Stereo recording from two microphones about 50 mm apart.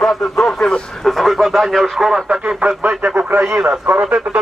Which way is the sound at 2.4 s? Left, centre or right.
Right.